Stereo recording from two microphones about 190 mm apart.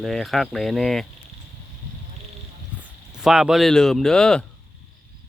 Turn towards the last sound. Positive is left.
turn(degrees=5)  # may be behind; listen again after turning